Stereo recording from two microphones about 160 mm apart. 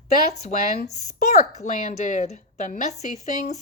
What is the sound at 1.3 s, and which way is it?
A woman's voice, 45° left (ahead or behind).